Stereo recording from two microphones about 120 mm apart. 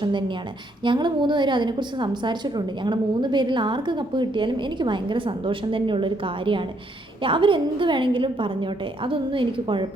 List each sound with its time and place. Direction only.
0.0 s a woman's voice: 40° right (ahead or behind)